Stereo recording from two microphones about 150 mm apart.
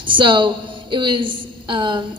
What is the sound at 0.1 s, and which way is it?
A woman's voice, 35° right (ahead or behind).